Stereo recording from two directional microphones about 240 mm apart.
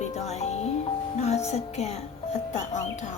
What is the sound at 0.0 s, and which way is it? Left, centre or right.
Music, left.